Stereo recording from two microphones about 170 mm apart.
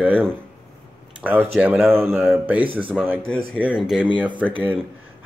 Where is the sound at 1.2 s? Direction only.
10° right (ahead or behind).